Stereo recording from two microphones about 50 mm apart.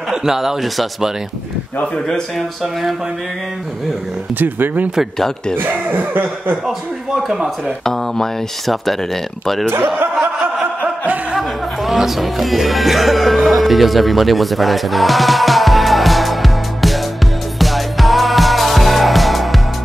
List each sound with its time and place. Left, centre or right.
0.1 s a man's voice: centre
2.3 s speech: centre
4.4 s speech: right
7.2 s speech: centre
11.3 s speech: centre
17.6 s music: centre